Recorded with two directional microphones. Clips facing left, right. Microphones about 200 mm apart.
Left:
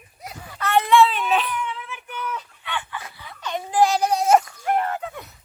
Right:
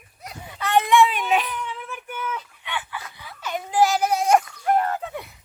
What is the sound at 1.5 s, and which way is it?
Baby cry, 40° right (ahead or behind).